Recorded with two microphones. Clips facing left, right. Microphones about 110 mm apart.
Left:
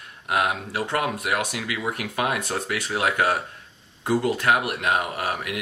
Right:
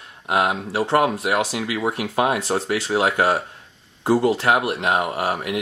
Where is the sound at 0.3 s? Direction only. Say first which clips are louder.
Right 3 dB; 30° right (ahead or behind).